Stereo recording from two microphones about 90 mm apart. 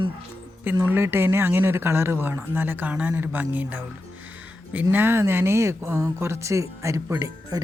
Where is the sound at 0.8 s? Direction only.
25° right (ahead or behind).